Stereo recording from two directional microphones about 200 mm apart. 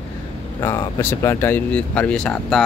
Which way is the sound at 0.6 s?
15° left (ahead or behind).